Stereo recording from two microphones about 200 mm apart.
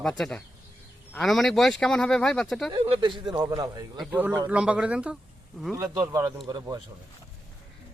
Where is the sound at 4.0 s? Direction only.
5° right (ahead or behind).